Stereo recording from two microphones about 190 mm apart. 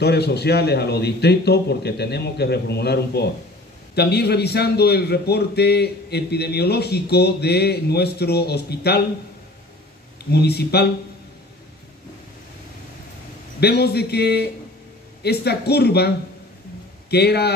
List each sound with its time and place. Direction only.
0.0 s a man's voice: 60° left (ahead or behind)
10.3 s a man's voice: 60° left (ahead or behind)
13.6 s a man's voice: 60° left (ahead or behind)
17.1 s a man's voice: 60° left (ahead or behind)